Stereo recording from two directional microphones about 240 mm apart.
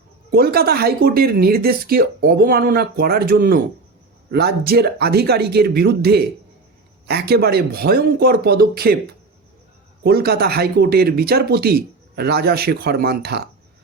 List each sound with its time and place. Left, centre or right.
0.3 s speech: right
10.0 s speech: right